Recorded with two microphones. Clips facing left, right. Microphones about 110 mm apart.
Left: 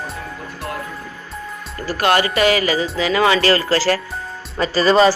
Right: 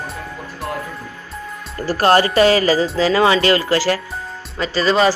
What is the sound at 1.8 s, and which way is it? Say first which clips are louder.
Speech: right 3 dB; 35° right (ahead or behind).